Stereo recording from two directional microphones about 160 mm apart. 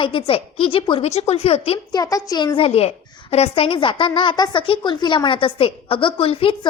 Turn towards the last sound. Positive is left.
turn(degrees=35)  # may be behind; listen again after turning